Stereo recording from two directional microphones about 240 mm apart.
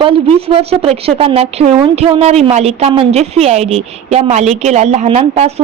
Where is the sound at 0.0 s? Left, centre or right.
Right.